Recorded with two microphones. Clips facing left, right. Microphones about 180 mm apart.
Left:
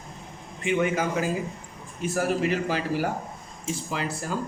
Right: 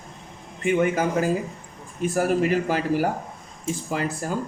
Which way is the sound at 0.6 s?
45° right (ahead or behind).